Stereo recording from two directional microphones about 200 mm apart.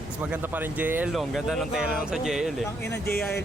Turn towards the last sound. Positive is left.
turn(degrees=55)  # may be behind; listen again after turning